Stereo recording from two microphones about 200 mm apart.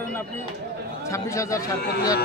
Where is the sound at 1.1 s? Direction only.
15° left (ahead or behind).